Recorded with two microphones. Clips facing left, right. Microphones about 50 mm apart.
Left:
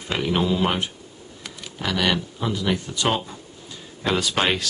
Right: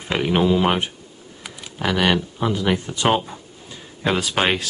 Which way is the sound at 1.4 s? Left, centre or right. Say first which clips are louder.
Right 4 dB; centre.